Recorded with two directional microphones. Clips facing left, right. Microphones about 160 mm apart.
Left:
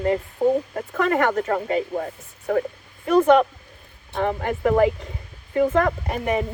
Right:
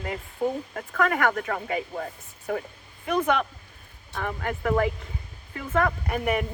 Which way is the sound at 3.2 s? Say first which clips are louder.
Left 10 dB; 30° left (ahead or behind).